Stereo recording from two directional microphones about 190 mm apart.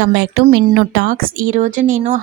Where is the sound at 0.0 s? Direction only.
65° right (ahead or behind).